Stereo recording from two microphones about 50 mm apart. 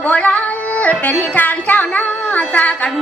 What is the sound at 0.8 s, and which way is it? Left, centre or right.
Music, left.